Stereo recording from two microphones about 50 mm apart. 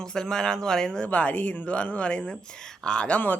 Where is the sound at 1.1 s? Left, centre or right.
Left.